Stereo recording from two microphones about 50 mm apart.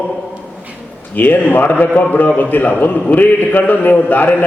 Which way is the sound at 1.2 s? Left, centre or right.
Left.